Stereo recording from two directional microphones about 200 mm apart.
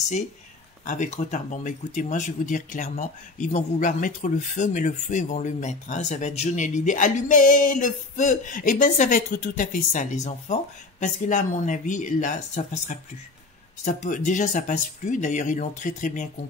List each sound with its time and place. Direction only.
0.8 s speech: 40° left (ahead or behind)